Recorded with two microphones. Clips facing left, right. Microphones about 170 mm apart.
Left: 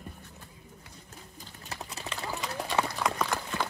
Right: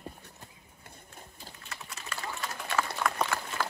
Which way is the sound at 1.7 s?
35° left (ahead or behind).